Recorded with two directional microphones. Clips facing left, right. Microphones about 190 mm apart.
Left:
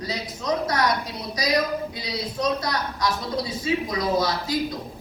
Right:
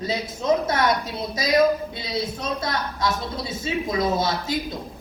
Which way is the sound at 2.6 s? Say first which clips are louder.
Right 1 dB; 25° right (ahead or behind).